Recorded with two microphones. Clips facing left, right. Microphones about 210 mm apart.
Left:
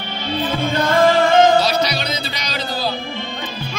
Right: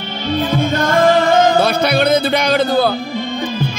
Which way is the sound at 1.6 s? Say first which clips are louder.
Right 5 dB; 55° right (ahead or behind).